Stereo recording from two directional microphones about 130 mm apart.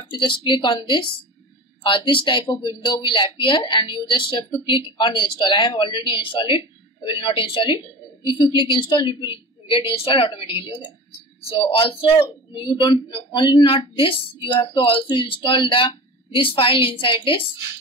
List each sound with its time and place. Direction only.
0.0 s speech: 35° left (ahead or behind)